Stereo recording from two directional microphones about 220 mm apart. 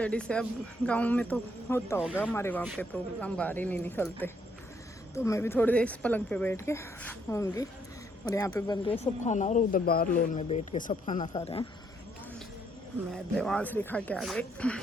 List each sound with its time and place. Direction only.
0.0 s a woman's voice: 5° left (ahead or behind); by 11.3 s 35° left (ahead or behind)
13.1 s speech: centre (ahead or behind)